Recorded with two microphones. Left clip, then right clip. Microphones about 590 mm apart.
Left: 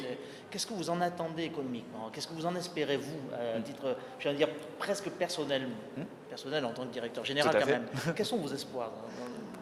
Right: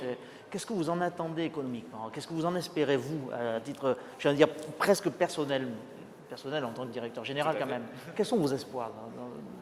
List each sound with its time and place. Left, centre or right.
0.5 s speech: right
8.1 s speech: right